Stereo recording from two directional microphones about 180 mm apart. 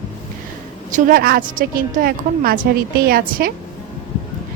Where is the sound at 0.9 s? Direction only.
50° right (ahead or behind).